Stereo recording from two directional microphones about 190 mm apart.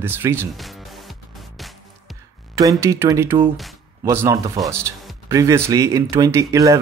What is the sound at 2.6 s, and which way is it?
Speech, 15° right (ahead or behind).